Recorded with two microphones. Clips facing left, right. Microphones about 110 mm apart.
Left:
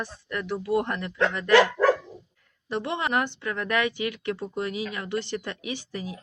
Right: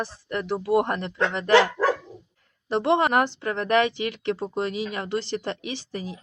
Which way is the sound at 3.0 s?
45° right (ahead or behind).